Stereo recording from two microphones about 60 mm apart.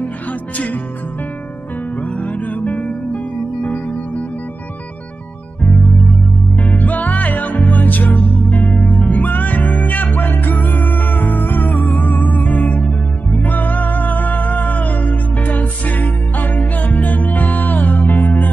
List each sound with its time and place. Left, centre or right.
2.1 s music: left
5.6 s music: left